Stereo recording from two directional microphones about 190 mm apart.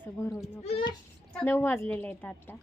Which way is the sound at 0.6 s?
30° left (ahead or behind).